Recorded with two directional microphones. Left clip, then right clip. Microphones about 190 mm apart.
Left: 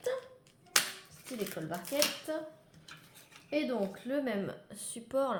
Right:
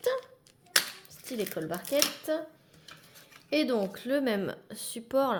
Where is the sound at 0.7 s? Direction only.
25° right (ahead or behind).